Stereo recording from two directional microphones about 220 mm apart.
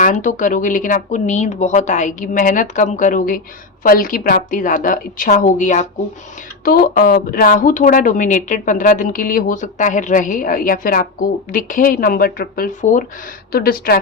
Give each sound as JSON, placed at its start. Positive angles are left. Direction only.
{"t": 0.0, "sound": "speech", "side_deg": 35}